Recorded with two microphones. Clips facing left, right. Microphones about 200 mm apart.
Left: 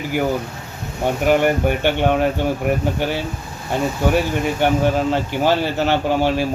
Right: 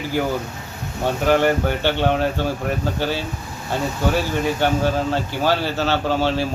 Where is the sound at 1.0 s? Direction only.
15° left (ahead or behind).